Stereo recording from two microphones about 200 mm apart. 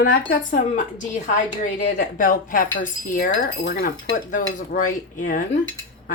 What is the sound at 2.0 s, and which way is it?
Speech, 40° left (ahead or behind).